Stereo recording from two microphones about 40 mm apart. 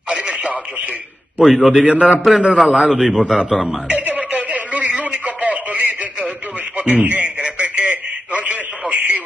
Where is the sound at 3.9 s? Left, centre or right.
Right.